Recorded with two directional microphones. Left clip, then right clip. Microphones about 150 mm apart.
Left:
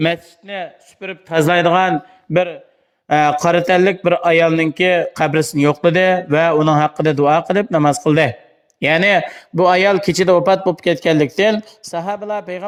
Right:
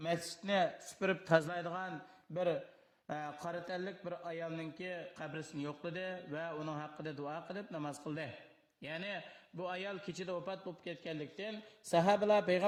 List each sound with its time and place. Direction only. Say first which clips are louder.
0.0 s speech: left 19 dB; 30° left (ahead or behind)